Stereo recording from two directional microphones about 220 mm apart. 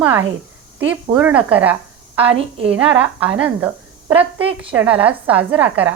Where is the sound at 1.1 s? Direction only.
10° right (ahead or behind).